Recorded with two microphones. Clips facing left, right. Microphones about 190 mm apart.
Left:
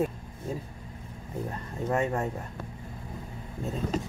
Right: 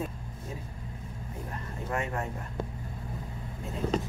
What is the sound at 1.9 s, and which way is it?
Speech, 30° left (ahead or behind).